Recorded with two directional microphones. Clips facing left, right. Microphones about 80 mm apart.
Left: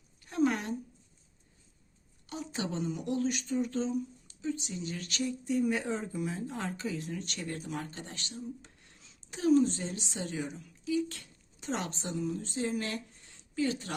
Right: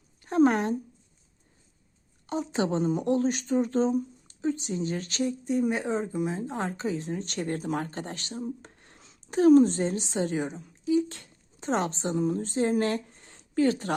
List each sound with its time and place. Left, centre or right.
0.2 s speech: right
2.2 s speech: right